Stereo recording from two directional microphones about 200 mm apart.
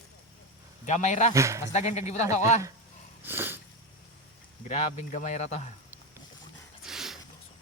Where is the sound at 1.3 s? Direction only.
15° right (ahead or behind).